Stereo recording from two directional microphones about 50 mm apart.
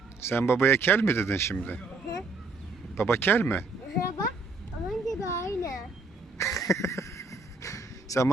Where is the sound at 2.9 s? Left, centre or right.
Left.